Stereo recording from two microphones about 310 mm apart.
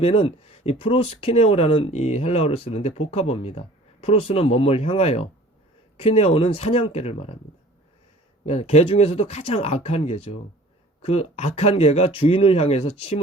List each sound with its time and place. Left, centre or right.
0.0 s speech: centre
8.4 s speech: left